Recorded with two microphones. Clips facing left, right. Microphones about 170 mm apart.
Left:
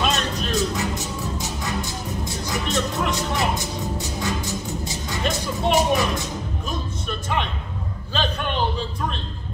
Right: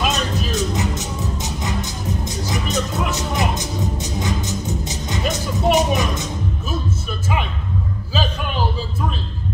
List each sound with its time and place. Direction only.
0.0 s music: 5° right (ahead or behind)
0.6 s music: 20° right (ahead or behind)
2.7 s music: centre (ahead or behind)
3.2 s music: 20° right (ahead or behind)
8.1 s a sound: 5° right (ahead or behind)